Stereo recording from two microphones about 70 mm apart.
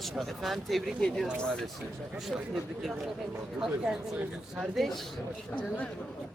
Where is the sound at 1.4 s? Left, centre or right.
Centre.